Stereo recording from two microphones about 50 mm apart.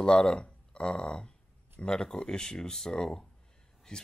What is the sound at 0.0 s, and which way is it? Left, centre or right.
Speech, centre.